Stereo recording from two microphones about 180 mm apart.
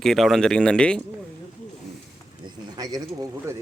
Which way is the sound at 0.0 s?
Centre (ahead or behind).